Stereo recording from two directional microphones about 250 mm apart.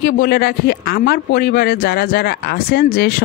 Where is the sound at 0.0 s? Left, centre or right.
Left.